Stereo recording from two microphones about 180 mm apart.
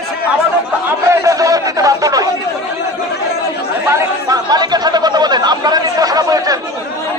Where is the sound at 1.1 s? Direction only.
20° right (ahead or behind).